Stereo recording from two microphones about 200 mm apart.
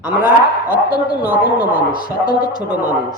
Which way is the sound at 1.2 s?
10° right (ahead or behind).